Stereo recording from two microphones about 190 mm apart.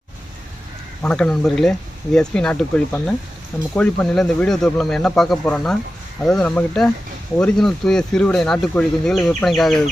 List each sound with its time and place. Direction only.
1.0 s speech: 5° left (ahead or behind)